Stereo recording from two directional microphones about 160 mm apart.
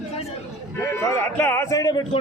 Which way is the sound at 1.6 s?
20° left (ahead or behind).